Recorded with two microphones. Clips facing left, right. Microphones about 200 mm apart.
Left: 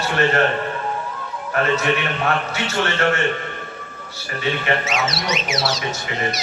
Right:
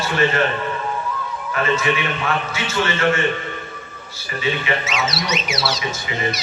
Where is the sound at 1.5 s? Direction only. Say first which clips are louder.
Left 1 dB; 55° left (ahead or behind).